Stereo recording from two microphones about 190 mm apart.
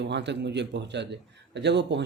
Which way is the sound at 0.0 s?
65° right (ahead or behind).